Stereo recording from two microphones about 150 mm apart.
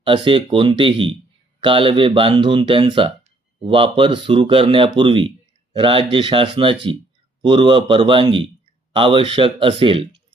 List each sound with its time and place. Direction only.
0.0 s speech: 35° right (ahead or behind)